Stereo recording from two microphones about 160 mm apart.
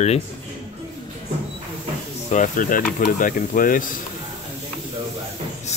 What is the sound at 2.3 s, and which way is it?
Speech, 55° left (ahead or behind).